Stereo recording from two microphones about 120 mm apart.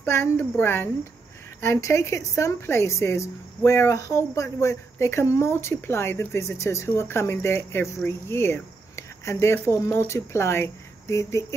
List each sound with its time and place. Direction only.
0.0 s speech: 20° left (ahead or behind)